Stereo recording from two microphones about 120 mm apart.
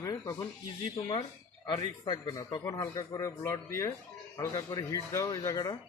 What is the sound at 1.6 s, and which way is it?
Speech, 45° left (ahead or behind).